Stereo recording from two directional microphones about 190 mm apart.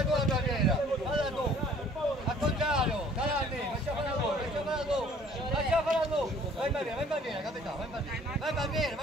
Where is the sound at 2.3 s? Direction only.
Centre (ahead or behind).